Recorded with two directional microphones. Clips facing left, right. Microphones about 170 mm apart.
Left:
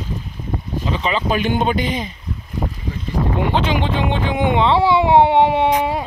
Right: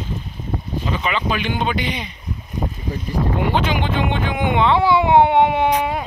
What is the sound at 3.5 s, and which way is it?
Speech, 30° left (ahead or behind).